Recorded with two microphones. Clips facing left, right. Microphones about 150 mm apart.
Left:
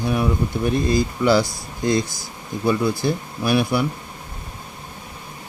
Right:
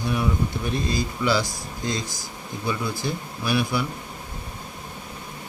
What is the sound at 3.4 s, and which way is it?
Speech, 55° left (ahead or behind).